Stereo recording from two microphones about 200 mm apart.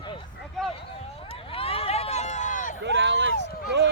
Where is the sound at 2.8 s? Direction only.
60° right (ahead or behind).